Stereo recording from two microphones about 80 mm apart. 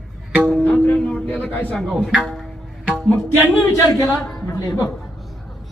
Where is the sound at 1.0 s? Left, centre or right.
Centre.